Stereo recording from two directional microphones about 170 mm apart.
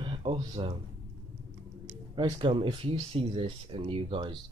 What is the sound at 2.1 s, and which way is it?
Speech, 30° right (ahead or behind).